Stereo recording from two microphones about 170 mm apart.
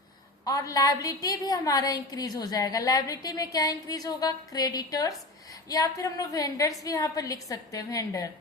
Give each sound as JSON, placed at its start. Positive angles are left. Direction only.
{"t": 0.4, "sound": "a woman's voice", "side_deg": 20}